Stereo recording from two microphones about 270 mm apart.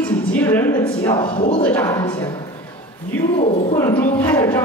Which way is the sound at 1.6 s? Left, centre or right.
Centre.